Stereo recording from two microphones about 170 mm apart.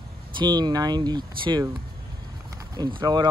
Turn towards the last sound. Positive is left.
turn(degrees=-25)  # may be behind; listen again after turning